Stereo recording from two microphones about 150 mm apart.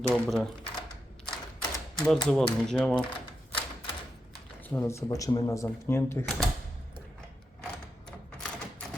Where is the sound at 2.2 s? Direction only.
5° left (ahead or behind).